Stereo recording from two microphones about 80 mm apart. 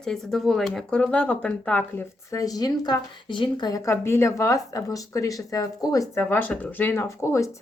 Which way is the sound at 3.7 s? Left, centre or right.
Left.